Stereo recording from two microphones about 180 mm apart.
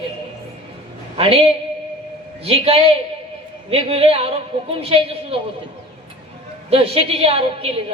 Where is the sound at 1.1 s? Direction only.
30° right (ahead or behind).